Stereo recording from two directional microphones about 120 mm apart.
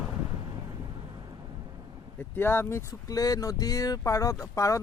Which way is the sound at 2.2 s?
15° left (ahead or behind).